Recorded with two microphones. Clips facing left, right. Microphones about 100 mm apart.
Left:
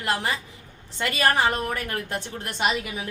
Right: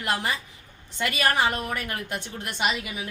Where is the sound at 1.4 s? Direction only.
15° right (ahead or behind).